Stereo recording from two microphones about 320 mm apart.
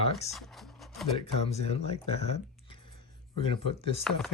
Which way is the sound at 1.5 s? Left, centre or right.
Centre.